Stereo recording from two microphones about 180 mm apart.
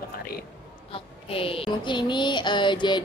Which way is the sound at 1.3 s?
30° left (ahead or behind).